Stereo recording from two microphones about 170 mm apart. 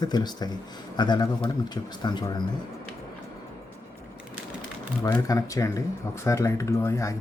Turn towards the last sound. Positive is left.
turn(degrees=20)  # may be behind; listen again after turning